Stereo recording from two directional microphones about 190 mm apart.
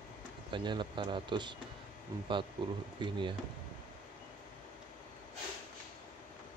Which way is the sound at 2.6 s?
25° right (ahead or behind).